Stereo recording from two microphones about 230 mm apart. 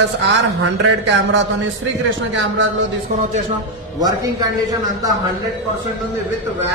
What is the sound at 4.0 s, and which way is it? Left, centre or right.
Speech, centre.